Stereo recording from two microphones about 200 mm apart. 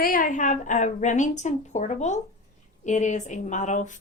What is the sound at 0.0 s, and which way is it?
Speech, 45° left (ahead or behind).